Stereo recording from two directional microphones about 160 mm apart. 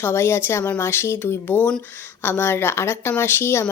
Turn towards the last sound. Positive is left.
turn(degrees=15)  # may be behind; listen again after turning